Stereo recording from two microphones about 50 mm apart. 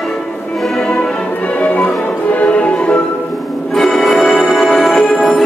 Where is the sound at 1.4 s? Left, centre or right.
Left.